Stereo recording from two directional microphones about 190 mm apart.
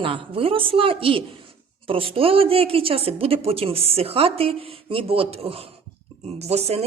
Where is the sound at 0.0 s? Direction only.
30° right (ahead or behind).